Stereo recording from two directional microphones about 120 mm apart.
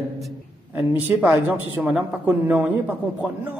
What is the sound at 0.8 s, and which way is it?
A woman's voice, 10° right (ahead or behind).